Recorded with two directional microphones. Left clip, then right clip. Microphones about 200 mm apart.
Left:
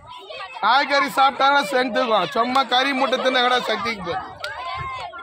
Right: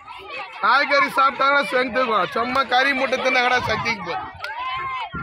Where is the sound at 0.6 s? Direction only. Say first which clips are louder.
Right 1 dB; 65° left (ahead or behind); by 4.0 s 45° left (ahead or behind).